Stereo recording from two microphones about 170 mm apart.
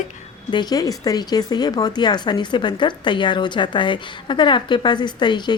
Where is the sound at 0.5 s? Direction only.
20° left (ahead or behind).